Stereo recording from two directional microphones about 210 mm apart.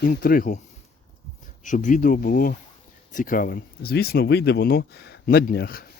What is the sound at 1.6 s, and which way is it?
Speech, 35° left (ahead or behind).